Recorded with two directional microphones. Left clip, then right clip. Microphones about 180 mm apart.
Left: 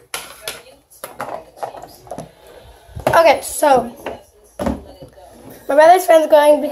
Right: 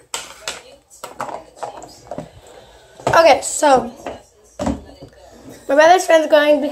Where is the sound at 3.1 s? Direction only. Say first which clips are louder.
Even; centre (ahead or behind).